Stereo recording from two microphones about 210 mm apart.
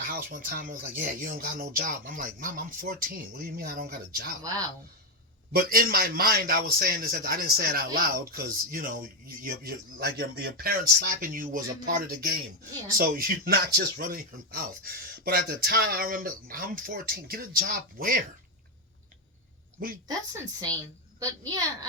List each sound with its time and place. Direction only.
0.0 s speech: 45° right (ahead or behind)
5.5 s speech: 45° right (ahead or behind)
21.2 s a child's voice: 15° right (ahead or behind)